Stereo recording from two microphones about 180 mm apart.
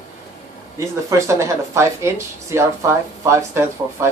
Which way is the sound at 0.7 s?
15° right (ahead or behind).